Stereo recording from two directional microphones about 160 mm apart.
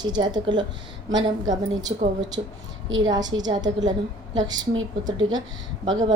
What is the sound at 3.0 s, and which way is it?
A woman's voice, 25° right (ahead or behind).